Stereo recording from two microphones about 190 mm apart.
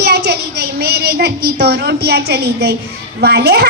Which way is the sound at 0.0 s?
60° right (ahead or behind).